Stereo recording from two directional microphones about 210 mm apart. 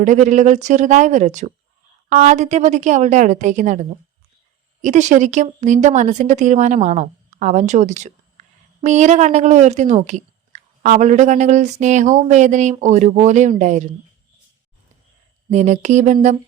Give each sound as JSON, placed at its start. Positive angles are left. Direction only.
{"t": 0.0, "sound": "speech", "side_deg": -35}
{"t": 15.4, "sound": "speech", "side_deg": -35}